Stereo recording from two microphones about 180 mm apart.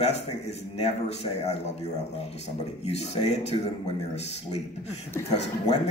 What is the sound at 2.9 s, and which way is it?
Speech, 35° left (ahead or behind).